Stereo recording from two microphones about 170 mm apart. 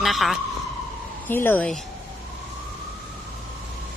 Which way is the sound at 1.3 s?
10° left (ahead or behind).